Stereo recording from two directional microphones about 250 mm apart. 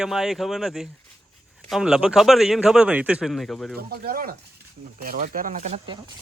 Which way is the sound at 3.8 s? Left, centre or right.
Right.